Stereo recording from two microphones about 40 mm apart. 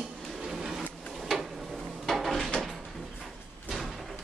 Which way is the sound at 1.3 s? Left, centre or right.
Centre.